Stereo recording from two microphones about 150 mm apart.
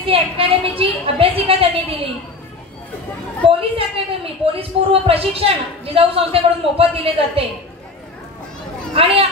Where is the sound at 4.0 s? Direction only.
40° right (ahead or behind).